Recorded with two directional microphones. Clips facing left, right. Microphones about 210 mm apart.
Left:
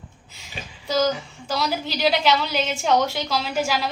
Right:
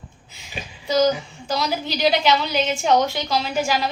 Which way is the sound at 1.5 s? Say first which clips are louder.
Right 1 dB; 5° left (ahead or behind).